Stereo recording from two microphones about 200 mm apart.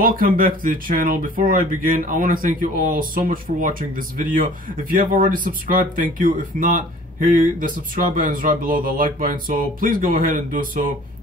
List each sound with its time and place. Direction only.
0.0 s speech: 45° right (ahead or behind)